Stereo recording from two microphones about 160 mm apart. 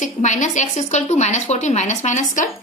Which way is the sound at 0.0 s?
50° left (ahead or behind).